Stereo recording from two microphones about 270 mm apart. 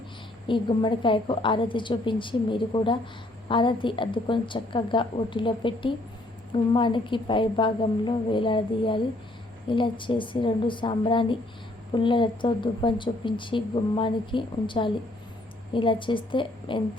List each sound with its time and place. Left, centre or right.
0.4 s speech: centre